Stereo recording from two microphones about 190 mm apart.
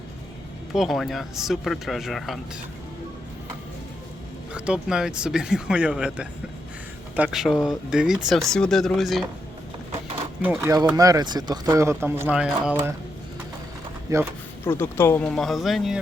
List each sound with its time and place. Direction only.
0.7 s speech: centre (ahead or behind)
4.5 s speech: 5° right (ahead or behind)
10.4 s speech: 10° right (ahead or behind)
14.1 s speech: 15° right (ahead or behind)
14.6 s speech: 10° left (ahead or behind)